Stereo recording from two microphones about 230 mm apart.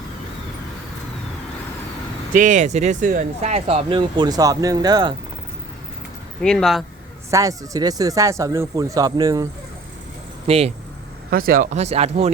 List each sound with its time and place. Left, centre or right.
2.3 s speech: right; by 5.1 s centre
6.4 s speech: centre
7.3 s speech: centre
10.4 s speech: right
11.3 s speech: right